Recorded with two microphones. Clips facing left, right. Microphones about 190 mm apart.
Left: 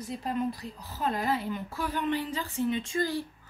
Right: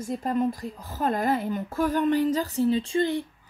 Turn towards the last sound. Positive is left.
turn(degrees=-25)  # may be behind; listen again after turning